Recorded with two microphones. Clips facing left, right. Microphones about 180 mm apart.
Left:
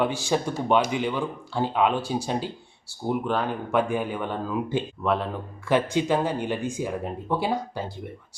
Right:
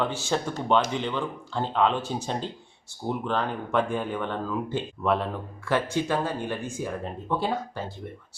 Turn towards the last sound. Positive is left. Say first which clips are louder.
# left 2 dB
turn(degrees=15)  # may be behind; listen again after turning